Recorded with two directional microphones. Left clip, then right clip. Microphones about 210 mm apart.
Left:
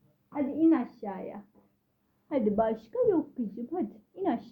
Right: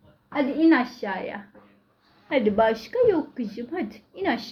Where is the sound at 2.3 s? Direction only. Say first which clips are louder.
Right 7 dB; 20° left (ahead or behind).